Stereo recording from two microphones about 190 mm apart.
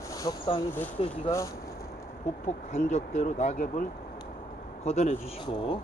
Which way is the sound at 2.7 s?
40° left (ahead or behind).